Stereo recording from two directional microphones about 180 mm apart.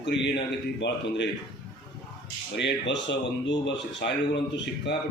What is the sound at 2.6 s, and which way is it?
A man's voice, 80° left.